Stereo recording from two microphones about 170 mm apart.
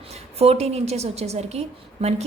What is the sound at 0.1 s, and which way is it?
A woman's voice, 35° right (ahead or behind).